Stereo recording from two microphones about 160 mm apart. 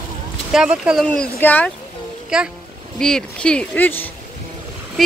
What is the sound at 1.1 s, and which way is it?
Speech, 10° left (ahead or behind).